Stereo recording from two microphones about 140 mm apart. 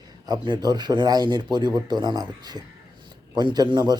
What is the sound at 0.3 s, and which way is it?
Speech, 30° right (ahead or behind).